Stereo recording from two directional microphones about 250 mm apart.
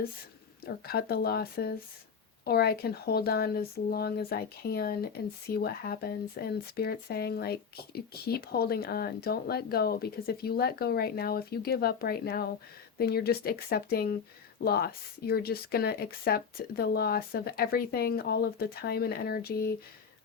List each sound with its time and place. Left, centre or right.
0.6 s speech: left